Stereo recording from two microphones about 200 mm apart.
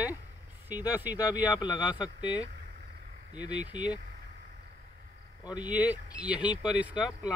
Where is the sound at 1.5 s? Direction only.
20° left (ahead or behind).